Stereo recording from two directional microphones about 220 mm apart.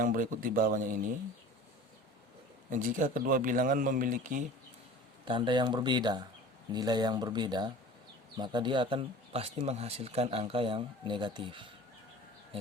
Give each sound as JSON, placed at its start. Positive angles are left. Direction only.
{"t": 0.0, "sound": "speech", "side_deg": -40}
{"t": 2.6, "sound": "speech", "side_deg": -35}
{"t": 5.2, "sound": "speech", "side_deg": -20}